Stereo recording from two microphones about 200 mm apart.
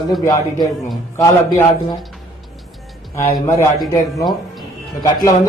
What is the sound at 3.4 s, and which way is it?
Speech, 15° left (ahead or behind).